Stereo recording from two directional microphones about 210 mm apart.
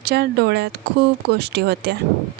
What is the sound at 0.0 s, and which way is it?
A woman's voice, 50° right (ahead or behind).